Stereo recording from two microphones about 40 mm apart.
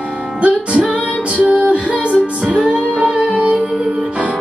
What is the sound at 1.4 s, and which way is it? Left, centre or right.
Music, right.